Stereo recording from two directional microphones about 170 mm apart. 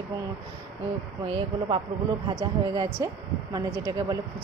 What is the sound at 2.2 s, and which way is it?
A woman's voice, 20° right (ahead or behind).